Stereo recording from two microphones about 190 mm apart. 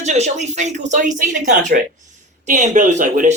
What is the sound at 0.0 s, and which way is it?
Speech, 35° right (ahead or behind).